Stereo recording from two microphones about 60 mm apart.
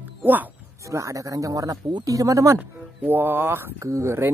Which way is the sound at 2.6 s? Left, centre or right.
Right.